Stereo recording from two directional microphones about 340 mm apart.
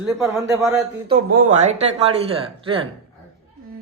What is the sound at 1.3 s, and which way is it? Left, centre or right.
Speech, right.